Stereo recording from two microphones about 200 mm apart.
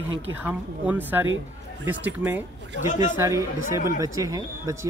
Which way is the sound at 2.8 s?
40° left (ahead or behind).